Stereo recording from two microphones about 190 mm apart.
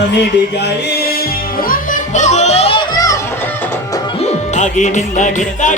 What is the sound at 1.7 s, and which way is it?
Music, 40° left (ahead or behind).